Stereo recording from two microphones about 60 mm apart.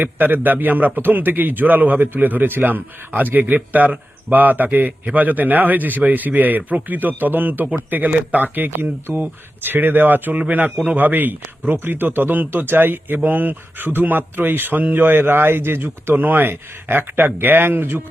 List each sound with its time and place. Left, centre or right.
0.0 s a man's voice: right